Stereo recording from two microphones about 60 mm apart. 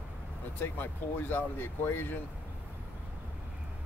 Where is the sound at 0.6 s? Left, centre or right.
Left.